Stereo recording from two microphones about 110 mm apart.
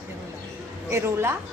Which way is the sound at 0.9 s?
25° right (ahead or behind).